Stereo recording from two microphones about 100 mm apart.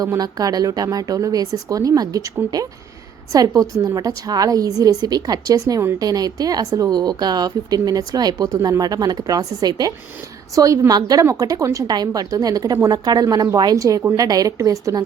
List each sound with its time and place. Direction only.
0.0 s a woman's voice: 40° right (ahead or behind)